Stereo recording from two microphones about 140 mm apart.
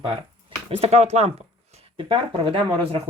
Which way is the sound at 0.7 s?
50° right (ahead or behind).